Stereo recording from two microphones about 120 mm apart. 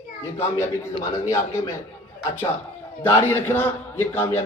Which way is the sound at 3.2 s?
20° left (ahead or behind).